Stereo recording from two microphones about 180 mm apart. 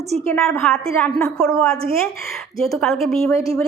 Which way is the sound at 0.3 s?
10° left (ahead or behind).